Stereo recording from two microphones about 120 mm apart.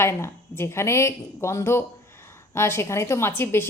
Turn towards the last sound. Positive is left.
turn(degrees=20)  # may be behind; listen again after turning